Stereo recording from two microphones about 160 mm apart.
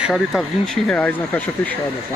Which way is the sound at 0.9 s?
10° left (ahead or behind).